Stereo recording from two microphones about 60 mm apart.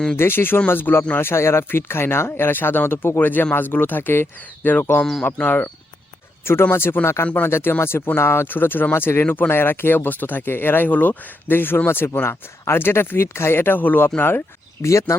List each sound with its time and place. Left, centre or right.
0.2 s speech: left
6.4 s speech: left
9.2 s speech: left
9.5 s speech: left
14.8 s speech: left